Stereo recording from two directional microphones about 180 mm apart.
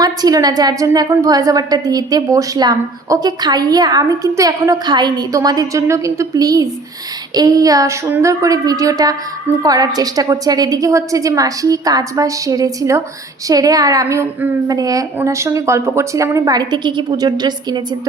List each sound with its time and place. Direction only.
0.0 s a woman's voice: 20° right (ahead or behind)